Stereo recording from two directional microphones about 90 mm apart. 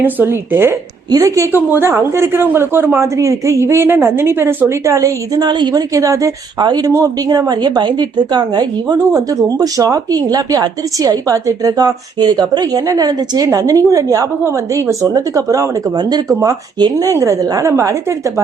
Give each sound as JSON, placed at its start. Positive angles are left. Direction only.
{"t": 0.0, "sound": "a woman's voice", "side_deg": -25}
{"t": 1.1, "sound": "speech", "side_deg": -40}
{"t": 1.5, "sound": "a woman's voice", "side_deg": -25}
{"t": 3.2, "sound": "a woman's voice", "side_deg": -35}
{"t": 5.5, "sound": "speech", "side_deg": -55}
{"t": 5.9, "sound": "a woman's voice", "side_deg": -40}
{"t": 16.0, "sound": "a woman's voice", "side_deg": -50}